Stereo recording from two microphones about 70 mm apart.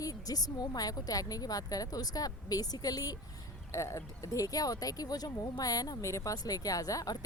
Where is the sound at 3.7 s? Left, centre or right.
Left.